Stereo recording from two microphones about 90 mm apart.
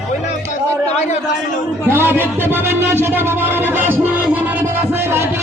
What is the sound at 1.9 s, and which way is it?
Music, 25° right (ahead or behind).